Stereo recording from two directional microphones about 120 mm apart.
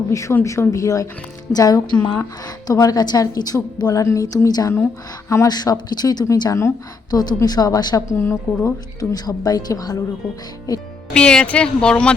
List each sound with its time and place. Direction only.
0.1 s a woman's voice: 25° left (ahead or behind)
8.1 s a woman's voice: 20° left (ahead or behind)
11.1 s speech: 10° left (ahead or behind)